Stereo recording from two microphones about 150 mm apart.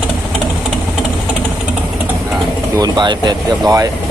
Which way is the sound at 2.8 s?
30° right (ahead or behind).